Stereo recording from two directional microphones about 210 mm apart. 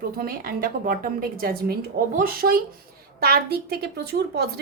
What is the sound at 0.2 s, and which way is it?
A woman's voice, 45° right (ahead or behind).